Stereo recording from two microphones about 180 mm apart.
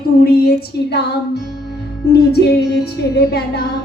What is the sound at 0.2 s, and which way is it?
Music, 60° left (ahead or behind).